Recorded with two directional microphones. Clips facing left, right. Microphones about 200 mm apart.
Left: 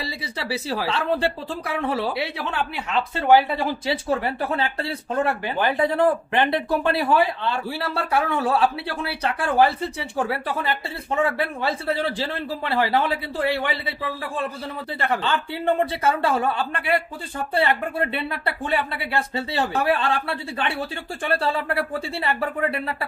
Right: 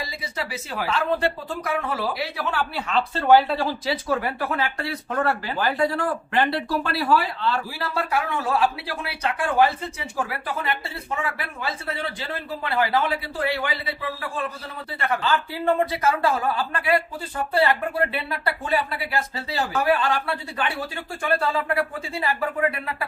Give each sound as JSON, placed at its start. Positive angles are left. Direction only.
{"t": 0.0, "sound": "speech", "side_deg": 30}
{"t": 2.5, "sound": "speech", "side_deg": 15}
{"t": 15.8, "sound": "speech", "side_deg": 30}
{"t": 18.4, "sound": "speech", "side_deg": 25}